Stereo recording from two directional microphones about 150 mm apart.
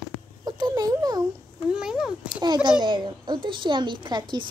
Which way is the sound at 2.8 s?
30° right (ahead or behind).